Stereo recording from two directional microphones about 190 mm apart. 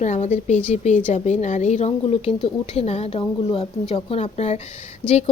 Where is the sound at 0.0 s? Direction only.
40° left (ahead or behind).